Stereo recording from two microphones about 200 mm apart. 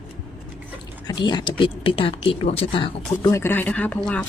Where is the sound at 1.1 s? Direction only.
20° left (ahead or behind).